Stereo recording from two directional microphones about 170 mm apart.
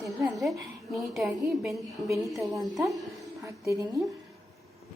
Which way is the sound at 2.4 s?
20° right (ahead or behind).